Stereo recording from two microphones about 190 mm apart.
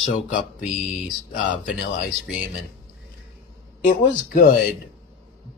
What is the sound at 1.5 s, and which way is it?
Speech, 45° left (ahead or behind).